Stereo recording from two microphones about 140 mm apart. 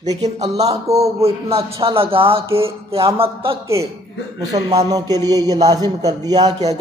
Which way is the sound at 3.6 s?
20° right (ahead or behind).